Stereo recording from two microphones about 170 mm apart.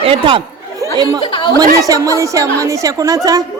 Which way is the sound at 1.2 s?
30° left (ahead or behind).